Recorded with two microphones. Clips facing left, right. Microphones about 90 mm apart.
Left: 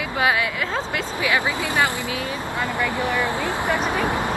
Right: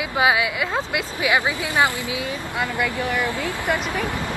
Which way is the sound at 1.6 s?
20° right (ahead or behind).